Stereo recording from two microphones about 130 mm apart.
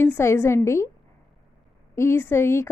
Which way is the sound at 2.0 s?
15° left (ahead or behind).